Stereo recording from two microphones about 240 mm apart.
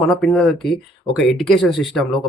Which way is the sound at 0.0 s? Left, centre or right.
Centre.